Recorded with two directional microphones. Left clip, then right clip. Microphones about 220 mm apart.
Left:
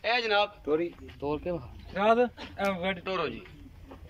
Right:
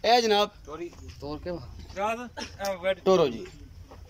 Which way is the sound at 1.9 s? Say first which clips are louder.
Left 6 dB; 45° left (ahead or behind).